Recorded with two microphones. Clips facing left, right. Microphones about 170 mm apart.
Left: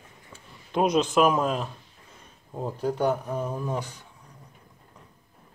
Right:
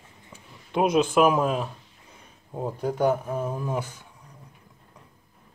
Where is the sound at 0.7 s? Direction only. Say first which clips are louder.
Right 1 dB; 5° right (ahead or behind).